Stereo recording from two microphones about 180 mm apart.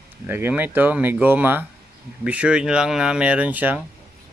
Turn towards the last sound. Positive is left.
turn(degrees=-10)  # may be behind; listen again after turning